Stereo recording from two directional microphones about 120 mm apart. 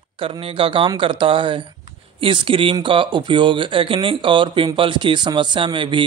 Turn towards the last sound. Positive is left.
turn(degrees=-45)  # may be behind; listen again after turning